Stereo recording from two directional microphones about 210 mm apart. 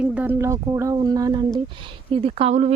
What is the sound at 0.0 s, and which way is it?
A woman's voice, 10° right (ahead or behind).